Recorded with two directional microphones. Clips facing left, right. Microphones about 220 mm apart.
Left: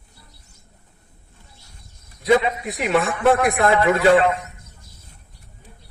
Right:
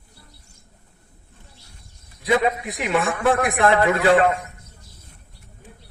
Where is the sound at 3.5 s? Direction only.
45° right (ahead or behind).